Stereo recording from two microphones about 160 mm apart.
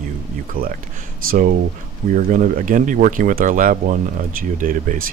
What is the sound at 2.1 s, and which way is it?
Speech, 55° right (ahead or behind).